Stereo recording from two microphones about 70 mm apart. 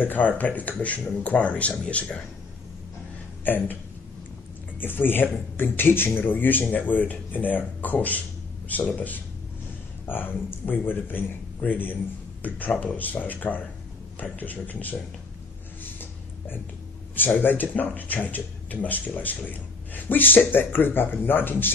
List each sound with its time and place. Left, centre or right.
0.0 s speech: left
3.4 s speech: left
4.7 s speech: left
15.8 s a sound: left
17.1 s speech: left